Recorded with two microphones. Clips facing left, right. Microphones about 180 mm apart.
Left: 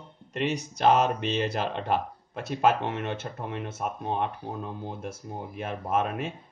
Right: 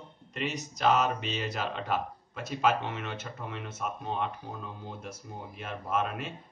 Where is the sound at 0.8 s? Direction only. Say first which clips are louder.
Left 4 dB; 45° left (ahead or behind).